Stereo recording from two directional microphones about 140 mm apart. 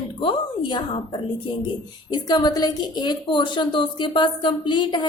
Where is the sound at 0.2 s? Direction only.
35° left (ahead or behind).